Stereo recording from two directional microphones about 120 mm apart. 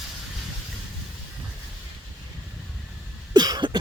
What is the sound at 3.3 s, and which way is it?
Cough, 35° right (ahead or behind).